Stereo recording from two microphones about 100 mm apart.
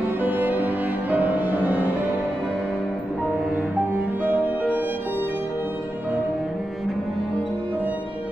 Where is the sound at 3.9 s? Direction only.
20° right (ahead or behind).